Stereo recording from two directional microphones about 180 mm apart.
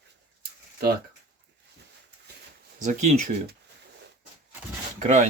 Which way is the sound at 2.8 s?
40° right (ahead or behind).